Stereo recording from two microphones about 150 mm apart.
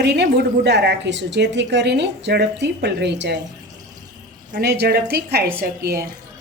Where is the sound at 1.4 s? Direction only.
90° right.